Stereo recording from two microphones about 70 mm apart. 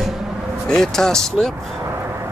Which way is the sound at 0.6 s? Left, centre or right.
Centre.